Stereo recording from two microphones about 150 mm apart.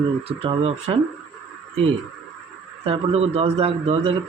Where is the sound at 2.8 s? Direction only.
40° right (ahead or behind).